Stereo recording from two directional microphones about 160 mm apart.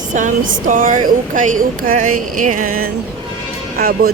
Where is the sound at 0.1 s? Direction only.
55° right (ahead or behind).